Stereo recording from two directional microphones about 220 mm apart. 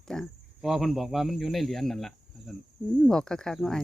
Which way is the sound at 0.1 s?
Centre (ahead or behind).